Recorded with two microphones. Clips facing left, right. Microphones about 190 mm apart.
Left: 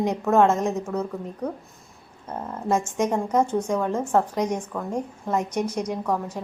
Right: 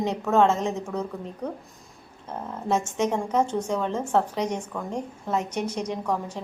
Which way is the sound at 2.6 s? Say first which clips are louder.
Left 1 dB; 10° left (ahead or behind).